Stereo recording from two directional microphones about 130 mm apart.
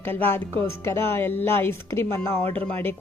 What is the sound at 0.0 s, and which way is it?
Speech, 15° left (ahead or behind).